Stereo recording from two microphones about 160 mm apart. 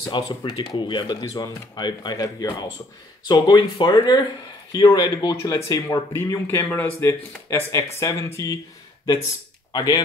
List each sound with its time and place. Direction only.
0.0 s speech: 30° left (ahead or behind)
9.7 s speech: 25° left (ahead or behind)